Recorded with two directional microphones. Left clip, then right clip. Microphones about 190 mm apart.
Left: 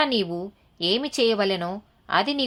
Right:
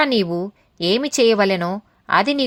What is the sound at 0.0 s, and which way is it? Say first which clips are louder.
Speech: right 5 dB; 45° right (ahead or behind).